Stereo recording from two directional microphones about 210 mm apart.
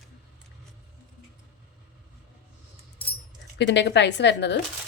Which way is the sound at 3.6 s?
55° left (ahead or behind).